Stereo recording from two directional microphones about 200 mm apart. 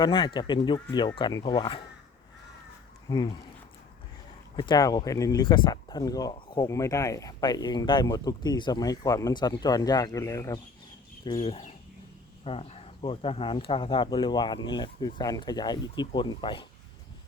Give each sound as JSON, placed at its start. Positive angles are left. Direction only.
{"t": 0.0, "sound": "speech", "side_deg": 25}
{"t": 4.5, "sound": "speech", "side_deg": 20}